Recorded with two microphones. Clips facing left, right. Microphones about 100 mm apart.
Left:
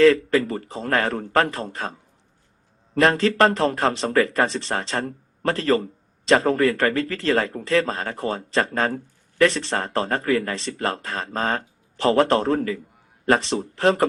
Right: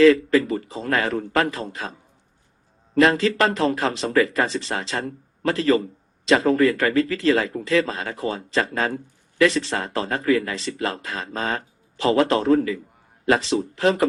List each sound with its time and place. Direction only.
0.0 s speech: 45° left (ahead or behind)